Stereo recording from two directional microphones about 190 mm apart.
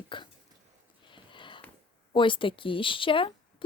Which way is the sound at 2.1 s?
25° left (ahead or behind).